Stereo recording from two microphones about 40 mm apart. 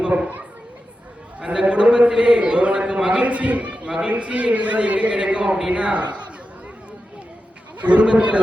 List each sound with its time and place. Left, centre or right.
0.0 s speech: right
1.4 s a man's voice: right
3.8 s a man's voice: right
4.1 s a man's voice: right
7.8 s a man's voice: right